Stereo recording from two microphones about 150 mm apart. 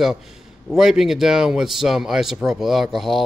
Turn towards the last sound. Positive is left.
turn(degrees=0)  # may be behind; listen again after turning